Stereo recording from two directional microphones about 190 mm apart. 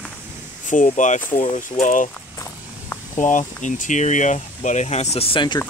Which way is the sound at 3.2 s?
40° left (ahead or behind).